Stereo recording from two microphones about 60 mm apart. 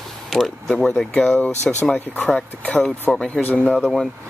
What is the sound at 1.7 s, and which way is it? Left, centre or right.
Speech, centre.